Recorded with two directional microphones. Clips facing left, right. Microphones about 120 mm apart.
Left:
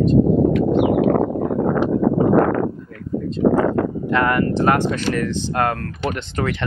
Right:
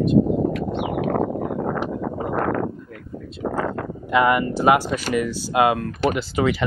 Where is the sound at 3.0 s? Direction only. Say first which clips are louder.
Left 11 dB; 10° right (ahead or behind).